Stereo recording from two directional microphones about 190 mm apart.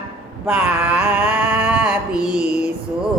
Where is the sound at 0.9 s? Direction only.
5° right (ahead or behind).